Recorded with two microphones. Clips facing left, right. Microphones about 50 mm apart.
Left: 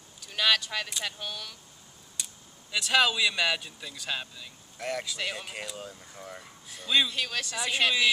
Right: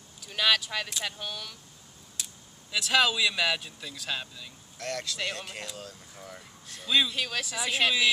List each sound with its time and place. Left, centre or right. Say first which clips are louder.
0.2 s speech: even; centre
2.2 s a sound: even; centre
2.7 s speech: even; centre